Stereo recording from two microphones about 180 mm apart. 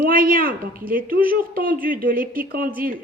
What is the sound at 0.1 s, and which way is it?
A woman's voice, 50° right (ahead or behind).